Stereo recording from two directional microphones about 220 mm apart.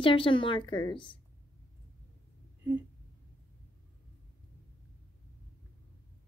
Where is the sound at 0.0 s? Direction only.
25° left (ahead or behind).